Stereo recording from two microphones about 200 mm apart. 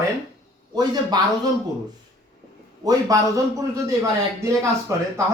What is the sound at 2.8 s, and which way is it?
Speech, 20° right (ahead or behind).